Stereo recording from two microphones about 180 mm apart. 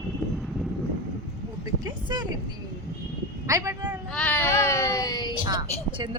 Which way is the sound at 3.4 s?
15° right (ahead or behind).